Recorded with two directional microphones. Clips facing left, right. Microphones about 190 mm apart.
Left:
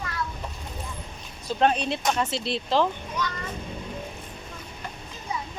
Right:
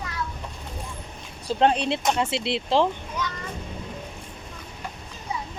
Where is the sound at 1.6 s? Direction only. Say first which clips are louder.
Right 2 dB; 25° right (ahead or behind).